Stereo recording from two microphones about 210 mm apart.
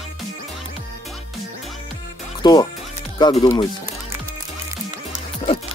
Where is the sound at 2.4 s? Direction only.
20° left (ahead or behind).